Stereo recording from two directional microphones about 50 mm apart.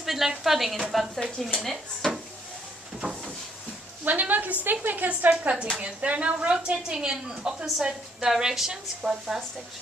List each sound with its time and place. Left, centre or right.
0.0 s speech: centre
3.0 s a sound: centre
4.0 s a woman's voice: right; by 9.4 s centre